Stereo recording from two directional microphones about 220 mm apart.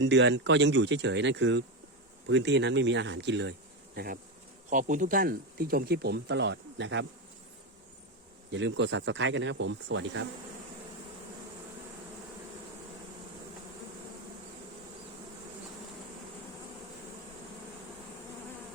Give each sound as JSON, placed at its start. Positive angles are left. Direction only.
{"t": 0.0, "sound": "speech", "side_deg": -55}
{"t": 3.9, "sound": "bee", "side_deg": -45}
{"t": 4.7, "sound": "speech", "side_deg": -35}
{"t": 8.4, "sound": "speech", "side_deg": -55}